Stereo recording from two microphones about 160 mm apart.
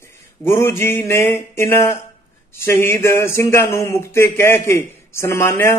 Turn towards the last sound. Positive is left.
turn(degrees=15)  # may be behind; listen again after turning